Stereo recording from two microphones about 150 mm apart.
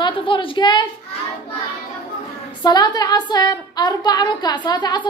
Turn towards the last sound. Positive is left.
turn(degrees=30)  # may be behind; listen again after turning